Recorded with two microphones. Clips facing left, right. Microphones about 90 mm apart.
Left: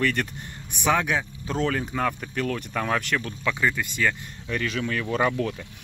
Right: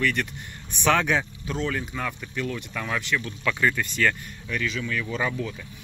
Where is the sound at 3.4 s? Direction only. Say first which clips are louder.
Right 1 dB; 15° left (ahead or behind).